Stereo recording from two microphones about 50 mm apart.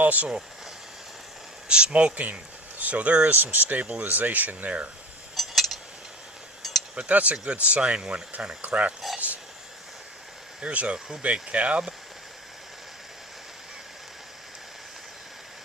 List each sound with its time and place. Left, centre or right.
0.0 s speech: right
1.6 s speech: right
5.3 s a sound: centre
6.9 s speech: right
9.1 s a sound: right
10.6 s speech: right